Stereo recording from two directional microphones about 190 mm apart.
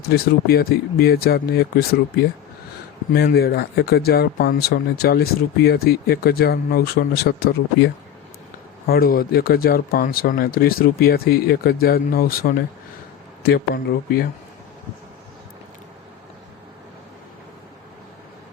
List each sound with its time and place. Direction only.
0.0 s speech: 55° left (ahead or behind)
8.9 s speech: 50° left (ahead or behind)